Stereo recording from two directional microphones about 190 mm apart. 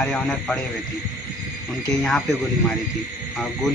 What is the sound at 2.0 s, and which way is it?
Speech, centre (ahead or behind).